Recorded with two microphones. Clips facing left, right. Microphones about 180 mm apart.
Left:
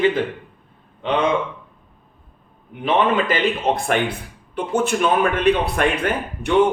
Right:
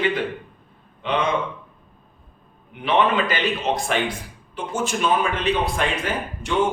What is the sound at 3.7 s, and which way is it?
A man's voice, 55° left (ahead or behind).